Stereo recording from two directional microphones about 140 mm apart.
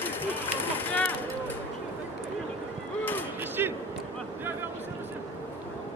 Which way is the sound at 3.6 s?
15° right (ahead or behind).